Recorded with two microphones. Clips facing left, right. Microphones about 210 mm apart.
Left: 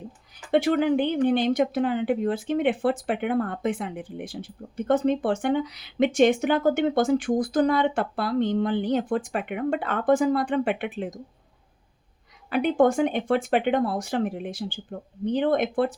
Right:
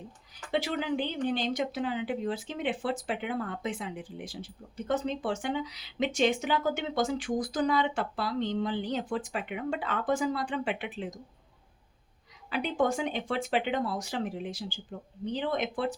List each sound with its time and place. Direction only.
0.5 s speech: 55° left (ahead or behind)
12.5 s speech: 55° left (ahead or behind)